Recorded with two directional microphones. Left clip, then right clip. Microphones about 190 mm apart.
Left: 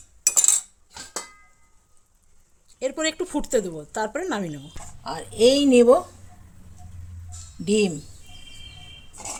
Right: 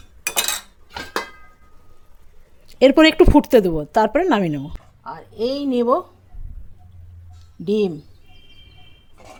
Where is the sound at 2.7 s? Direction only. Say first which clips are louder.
Right 14 dB; 40° right (ahead or behind).